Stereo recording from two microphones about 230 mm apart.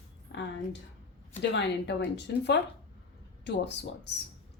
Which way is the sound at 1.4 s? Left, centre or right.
Left.